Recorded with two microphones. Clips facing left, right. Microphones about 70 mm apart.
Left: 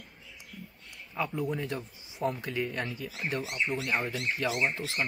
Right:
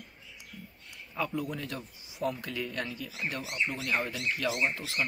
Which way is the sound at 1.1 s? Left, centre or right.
Centre.